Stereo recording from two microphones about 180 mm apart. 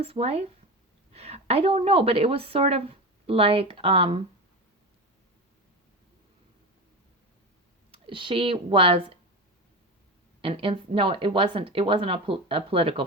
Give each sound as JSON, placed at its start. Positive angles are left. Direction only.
{"t": 0.0, "sound": "a woman's voice", "side_deg": -35}
{"t": 7.9, "sound": "speech", "side_deg": -30}
{"t": 10.4, "sound": "speech", "side_deg": -30}